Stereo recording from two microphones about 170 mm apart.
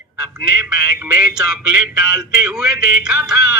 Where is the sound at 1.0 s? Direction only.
5° right (ahead or behind).